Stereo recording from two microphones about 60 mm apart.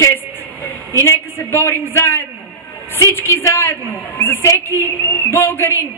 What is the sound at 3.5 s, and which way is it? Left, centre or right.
A woman's voice, left.